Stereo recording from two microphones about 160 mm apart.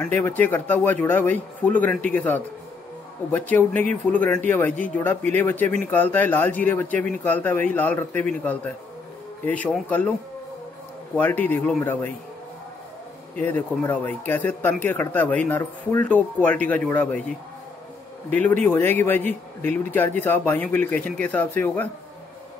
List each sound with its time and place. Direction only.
0.0 s speech: 10° left (ahead or behind)
3.7 s speech: 50° right (ahead or behind)
4.1 s speech: 10° left (ahead or behind)
11.1 s speech: 10° left (ahead or behind)
13.4 s speech: 10° left (ahead or behind)
18.3 s speech: 10° left (ahead or behind)